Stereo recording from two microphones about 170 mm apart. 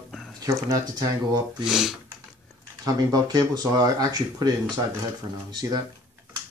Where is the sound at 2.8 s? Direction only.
20° right (ahead or behind).